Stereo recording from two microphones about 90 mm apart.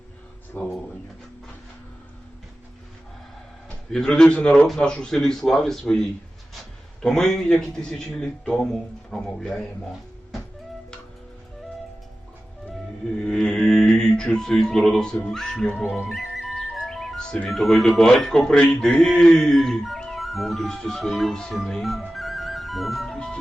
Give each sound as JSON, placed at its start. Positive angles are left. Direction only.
{"t": 0.5, "sound": "speech", "side_deg": 20}
{"t": 3.9, "sound": "a man's voice", "side_deg": 10}
{"t": 13.2, "sound": "music", "side_deg": 10}
{"t": 16.0, "sound": "speech", "side_deg": -5}